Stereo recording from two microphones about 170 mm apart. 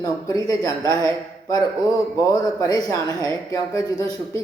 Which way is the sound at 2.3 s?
20° left (ahead or behind).